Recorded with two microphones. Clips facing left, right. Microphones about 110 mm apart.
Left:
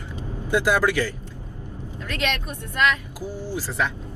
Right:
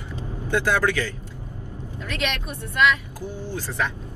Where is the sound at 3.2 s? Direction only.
10° left (ahead or behind).